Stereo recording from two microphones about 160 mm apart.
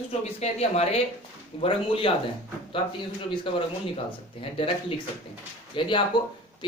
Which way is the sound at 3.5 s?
30° left (ahead or behind).